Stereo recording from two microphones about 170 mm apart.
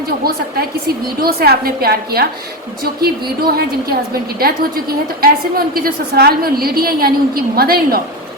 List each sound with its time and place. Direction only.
0.3 s a woman's voice: 65° right (ahead or behind)